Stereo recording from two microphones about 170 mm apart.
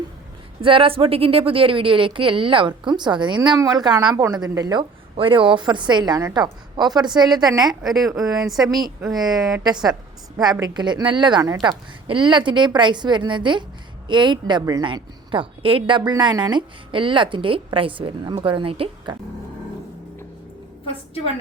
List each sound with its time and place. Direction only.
0.6 s a woman's voice: 30° right (ahead or behind)
7.8 s speech: centre (ahead or behind)
9.1 s a woman's voice: 25° right (ahead or behind)
10.6 s a woman's voice: 25° right (ahead or behind)